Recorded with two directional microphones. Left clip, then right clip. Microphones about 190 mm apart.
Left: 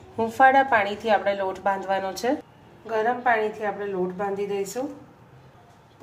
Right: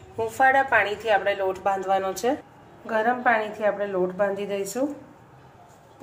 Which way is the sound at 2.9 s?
20° right (ahead or behind).